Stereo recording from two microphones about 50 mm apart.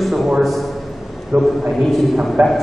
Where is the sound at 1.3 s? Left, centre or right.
Right.